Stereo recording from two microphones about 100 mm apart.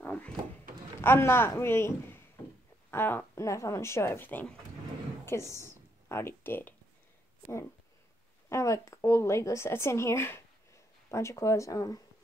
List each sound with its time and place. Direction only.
0.0 s a sound: 15° left (ahead or behind)
1.0 s speech: 25° left (ahead or behind)
8.5 s speech: 30° left (ahead or behind)